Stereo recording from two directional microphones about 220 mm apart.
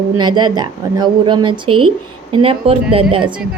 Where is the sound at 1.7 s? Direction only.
90° right.